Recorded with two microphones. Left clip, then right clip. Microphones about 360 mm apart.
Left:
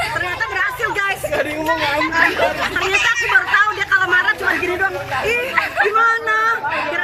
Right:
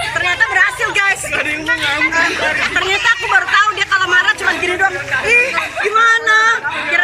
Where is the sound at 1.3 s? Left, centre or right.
Left.